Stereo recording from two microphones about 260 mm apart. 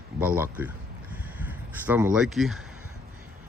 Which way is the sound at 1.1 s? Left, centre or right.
Centre.